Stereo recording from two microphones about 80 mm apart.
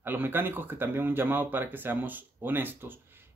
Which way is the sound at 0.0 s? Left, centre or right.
Right.